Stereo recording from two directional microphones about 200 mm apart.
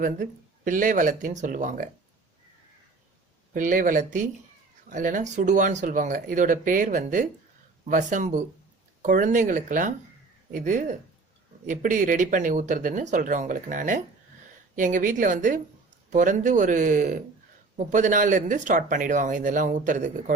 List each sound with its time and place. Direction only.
0.0 s speech: 40° right (ahead or behind)
3.5 s speech: 40° right (ahead or behind)